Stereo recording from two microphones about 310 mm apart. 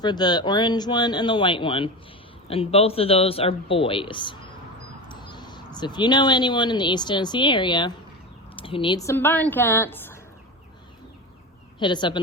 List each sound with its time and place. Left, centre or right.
0.0 s speech: centre
11.8 s speech: centre